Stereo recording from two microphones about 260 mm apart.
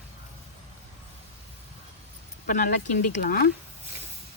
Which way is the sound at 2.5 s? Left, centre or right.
Left.